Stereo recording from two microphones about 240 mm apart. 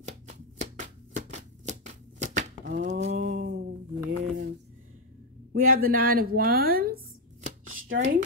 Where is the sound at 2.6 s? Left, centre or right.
Right.